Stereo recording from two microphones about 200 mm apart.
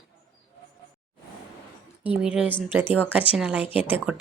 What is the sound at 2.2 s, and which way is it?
Speech, 5° right (ahead or behind).